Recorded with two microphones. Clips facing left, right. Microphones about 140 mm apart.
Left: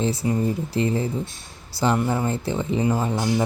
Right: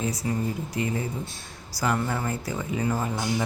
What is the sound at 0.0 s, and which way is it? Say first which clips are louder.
Speech: left 5 dB; 30° left (ahead or behind).